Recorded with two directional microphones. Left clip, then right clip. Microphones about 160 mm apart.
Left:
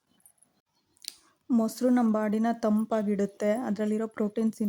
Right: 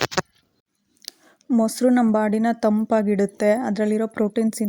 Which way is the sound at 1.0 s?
40° right (ahead or behind).